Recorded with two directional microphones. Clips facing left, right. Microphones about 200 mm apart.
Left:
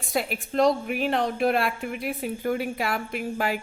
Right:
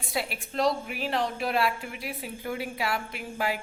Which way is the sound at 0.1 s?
45° left (ahead or behind).